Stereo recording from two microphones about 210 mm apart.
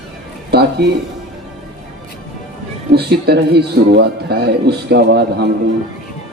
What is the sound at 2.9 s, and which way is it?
Speech, 50° right (ahead or behind).